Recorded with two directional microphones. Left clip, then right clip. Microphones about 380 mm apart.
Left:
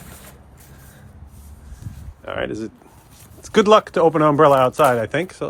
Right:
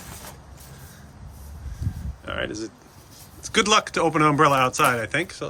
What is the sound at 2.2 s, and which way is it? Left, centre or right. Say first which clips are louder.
Speech: left 4 dB; centre.